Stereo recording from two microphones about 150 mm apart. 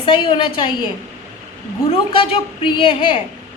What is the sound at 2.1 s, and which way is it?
A woman's voice, 35° left (ahead or behind).